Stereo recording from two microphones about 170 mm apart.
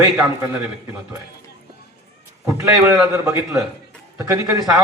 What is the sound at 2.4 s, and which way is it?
A man's voice, 15° right (ahead or behind).